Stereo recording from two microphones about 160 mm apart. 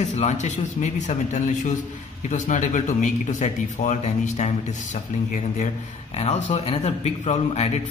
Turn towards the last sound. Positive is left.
turn(degrees=45)  # may be behind; listen again after turning